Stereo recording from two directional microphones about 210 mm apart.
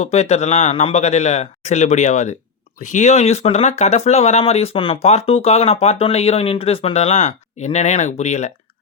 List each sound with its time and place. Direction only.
0.0 s speech: 30° left (ahead or behind)